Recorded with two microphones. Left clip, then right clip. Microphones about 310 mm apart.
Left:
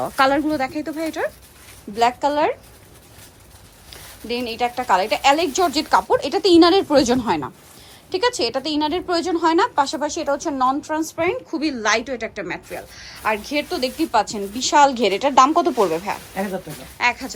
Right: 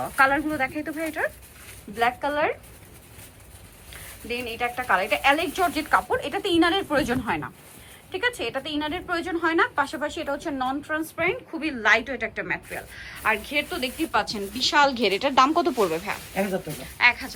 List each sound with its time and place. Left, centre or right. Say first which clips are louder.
0.2 s a woman's voice: left 3 dB; centre
4.3 s a woman's voice: left 5 dB; centre
16.3 s speech: right 4 dB; centre
17.0 s a woman's voice: even; centre